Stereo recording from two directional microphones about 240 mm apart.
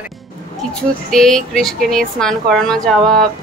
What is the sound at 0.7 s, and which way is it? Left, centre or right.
Speech, centre.